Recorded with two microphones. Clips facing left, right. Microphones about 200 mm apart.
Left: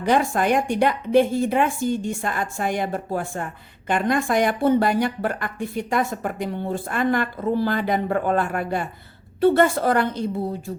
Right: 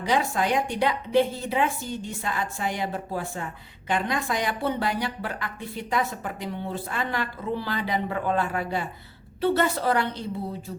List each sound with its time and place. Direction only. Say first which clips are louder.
0.0 s a woman's voice: left 5 dB; 55° left (ahead or behind)